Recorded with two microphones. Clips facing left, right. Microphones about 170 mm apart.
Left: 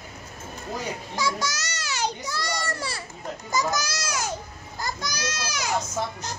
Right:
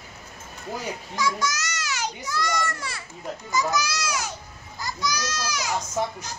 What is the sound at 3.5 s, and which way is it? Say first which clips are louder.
A child's voice: right 1 dB; 45° left (ahead or behind).